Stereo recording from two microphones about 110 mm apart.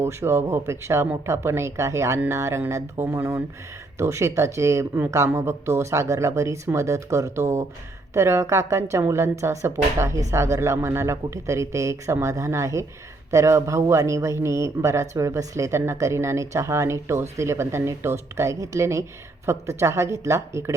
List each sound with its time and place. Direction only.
0.0 s speech: 25° right (ahead or behind)